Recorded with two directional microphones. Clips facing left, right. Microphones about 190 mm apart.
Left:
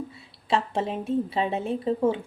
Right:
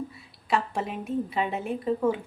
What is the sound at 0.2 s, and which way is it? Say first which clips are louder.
A woman's voice: left 2 dB; 25° left (ahead or behind).